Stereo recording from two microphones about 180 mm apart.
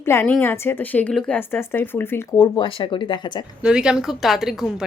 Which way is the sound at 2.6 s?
30° left (ahead or behind).